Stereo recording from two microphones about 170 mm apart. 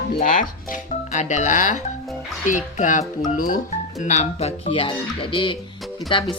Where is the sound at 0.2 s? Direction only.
50° left (ahead or behind).